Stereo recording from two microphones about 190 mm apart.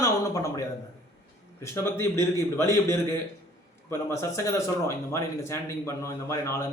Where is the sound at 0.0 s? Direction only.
15° left (ahead or behind).